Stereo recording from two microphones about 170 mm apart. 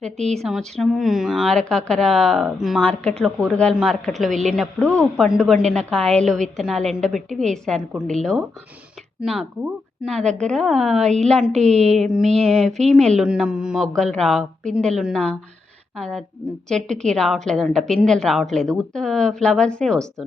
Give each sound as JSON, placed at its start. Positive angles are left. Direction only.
{"t": 0.3, "sound": "speech", "side_deg": 0}
{"t": 11.7, "sound": "a sound", "side_deg": -40}
{"t": 12.1, "sound": "speech", "side_deg": 0}